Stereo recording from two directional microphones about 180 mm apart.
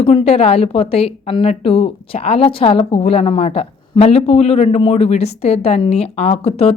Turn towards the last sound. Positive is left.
turn(degrees=35)  # may be behind; listen again after turning